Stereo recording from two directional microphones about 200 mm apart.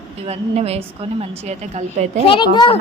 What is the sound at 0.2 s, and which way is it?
A woman's voice, 30° right (ahead or behind).